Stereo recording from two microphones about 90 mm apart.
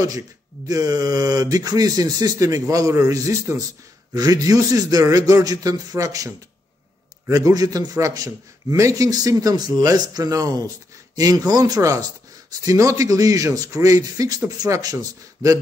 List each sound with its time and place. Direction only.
0.7 s speech: 45° right (ahead or behind)